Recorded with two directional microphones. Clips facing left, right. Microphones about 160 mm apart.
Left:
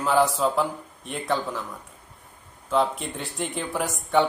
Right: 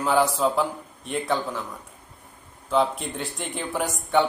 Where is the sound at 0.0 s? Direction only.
Centre (ahead or behind).